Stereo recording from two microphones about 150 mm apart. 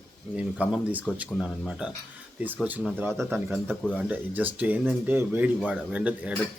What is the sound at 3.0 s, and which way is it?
A man's voice, 15° right (ahead or behind).